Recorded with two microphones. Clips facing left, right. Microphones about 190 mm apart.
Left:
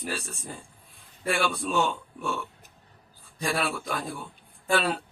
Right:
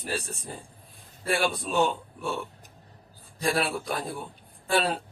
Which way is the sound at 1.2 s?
35° right (ahead or behind).